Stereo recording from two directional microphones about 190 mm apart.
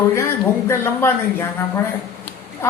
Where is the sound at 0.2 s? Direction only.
15° left (ahead or behind).